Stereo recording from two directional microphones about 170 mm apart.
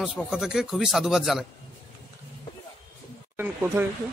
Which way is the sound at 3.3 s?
10° right (ahead or behind).